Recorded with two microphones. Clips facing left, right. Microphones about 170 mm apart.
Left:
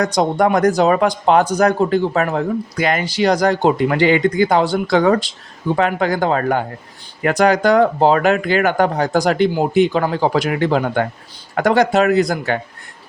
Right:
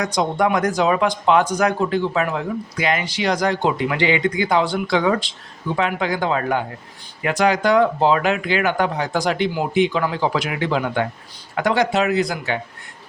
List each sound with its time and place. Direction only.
0.2 s speech: 40° left (ahead or behind)